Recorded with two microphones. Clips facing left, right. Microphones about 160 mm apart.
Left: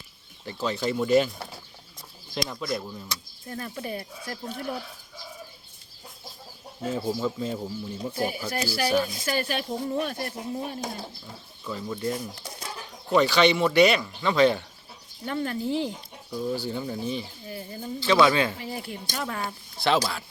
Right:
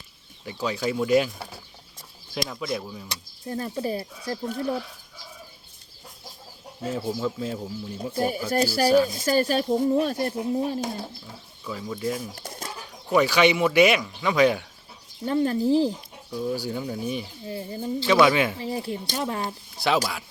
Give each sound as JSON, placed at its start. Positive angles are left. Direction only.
{"t": 0.4, "sound": "speech", "side_deg": -5}
{"t": 3.1, "sound": "speech", "side_deg": -30}
{"t": 6.8, "sound": "speech", "side_deg": 5}
{"t": 8.1, "sound": "speech", "side_deg": -35}
{"t": 11.6, "sound": "speech", "side_deg": 0}
{"t": 15.2, "sound": "speech", "side_deg": -30}
{"t": 16.3, "sound": "speech", "side_deg": 0}
{"t": 17.4, "sound": "speech", "side_deg": -25}
{"t": 18.0, "sound": "speech", "side_deg": -15}
{"t": 18.6, "sound": "speech", "side_deg": -30}
{"t": 19.8, "sound": "speech", "side_deg": -10}